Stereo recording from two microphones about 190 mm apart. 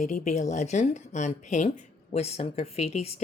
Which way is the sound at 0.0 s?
35° left (ahead or behind).